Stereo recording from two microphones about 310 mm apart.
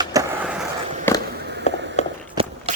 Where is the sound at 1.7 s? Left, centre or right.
Left.